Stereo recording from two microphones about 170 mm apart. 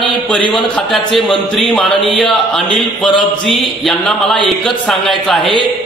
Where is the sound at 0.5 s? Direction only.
Centre (ahead or behind).